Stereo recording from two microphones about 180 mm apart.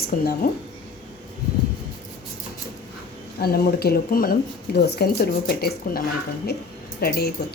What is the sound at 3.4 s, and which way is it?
A woman's voice, 60° left (ahead or behind).